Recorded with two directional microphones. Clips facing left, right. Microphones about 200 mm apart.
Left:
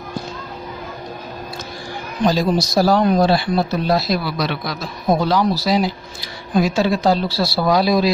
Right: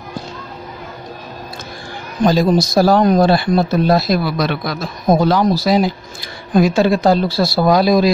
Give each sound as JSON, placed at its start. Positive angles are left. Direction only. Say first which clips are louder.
{"t": 2.2, "sound": "speech", "louder": "right 4 dB", "side_deg": -50}